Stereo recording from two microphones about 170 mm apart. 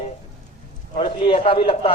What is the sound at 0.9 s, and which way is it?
Speech, 35° left (ahead or behind).